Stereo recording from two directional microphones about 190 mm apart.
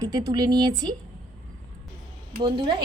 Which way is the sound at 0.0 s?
20° right (ahead or behind).